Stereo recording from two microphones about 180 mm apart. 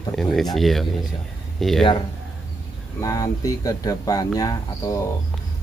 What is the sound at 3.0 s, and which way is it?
Speech, 20° left (ahead or behind).